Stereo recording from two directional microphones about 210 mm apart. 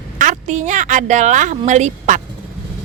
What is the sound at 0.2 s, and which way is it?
Speech, 35° right (ahead or behind).